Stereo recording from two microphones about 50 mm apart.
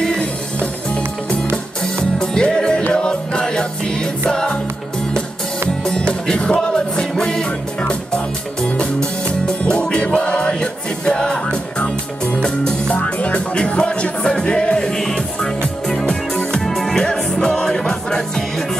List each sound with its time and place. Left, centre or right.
2.1 s music: centre
5.9 s music: centre
8.6 s music: centre